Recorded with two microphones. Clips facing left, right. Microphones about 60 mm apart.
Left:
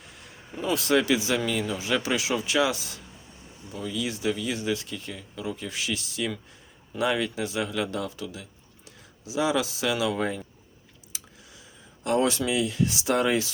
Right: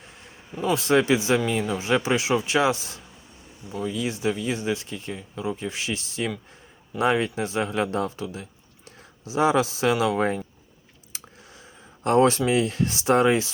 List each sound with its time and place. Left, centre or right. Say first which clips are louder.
0.7 s speech: right 3 dB; right
11.1 s a sound: right 3 dB; right
12.4 s speech: right 3 dB; right